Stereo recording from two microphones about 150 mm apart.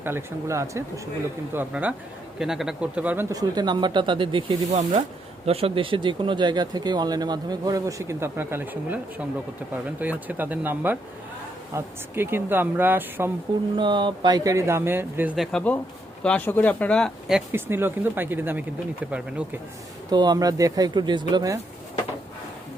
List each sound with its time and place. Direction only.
0.0 s speech: 15° right (ahead or behind); by 4.5 s 35° right (ahead or behind)
4.7 s speech: 55° right (ahead or behind)
5.5 s speech: 40° right (ahead or behind); by 13.3 s 15° right (ahead or behind)
13.7 s speech: 30° right (ahead or behind); by 15.4 s 10° right (ahead or behind)
15.5 s speech: 10° left (ahead or behind)
17.5 s speech: 15° right (ahead or behind)
20.1 s speech: 30° right (ahead or behind)